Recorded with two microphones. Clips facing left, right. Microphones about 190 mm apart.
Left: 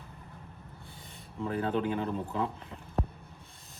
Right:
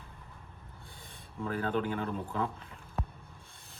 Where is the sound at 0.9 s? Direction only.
55° right (ahead or behind).